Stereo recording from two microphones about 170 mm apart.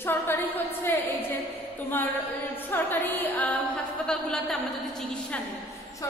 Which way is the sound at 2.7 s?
10° left (ahead or behind).